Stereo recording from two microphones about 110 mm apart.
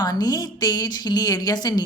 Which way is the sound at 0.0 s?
35° left (ahead or behind).